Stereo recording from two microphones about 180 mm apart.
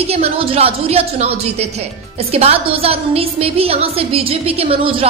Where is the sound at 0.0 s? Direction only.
35° right (ahead or behind).